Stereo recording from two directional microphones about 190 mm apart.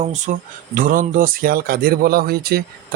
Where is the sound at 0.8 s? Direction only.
45° right (ahead or behind).